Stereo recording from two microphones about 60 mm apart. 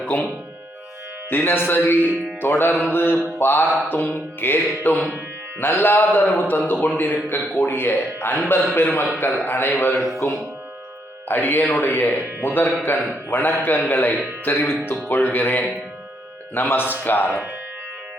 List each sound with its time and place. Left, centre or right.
1.3 s a man's voice: left
9.9 s speech: centre
11.3 s a man's voice: left